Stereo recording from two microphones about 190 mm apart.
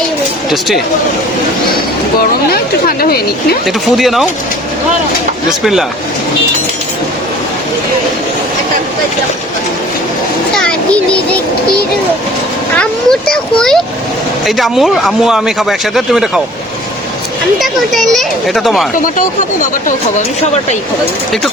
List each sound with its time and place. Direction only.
2.5 s speech: 50° left (ahead or behind)
3.7 s speech: centre (ahead or behind)
5.5 s speech: centre (ahead or behind)
10.5 s a child's voice: 5° left (ahead or behind)
12.7 s a sound: 5° left (ahead or behind)
13.3 s speech: 5° left (ahead or behind)
17.6 s speech: centre (ahead or behind)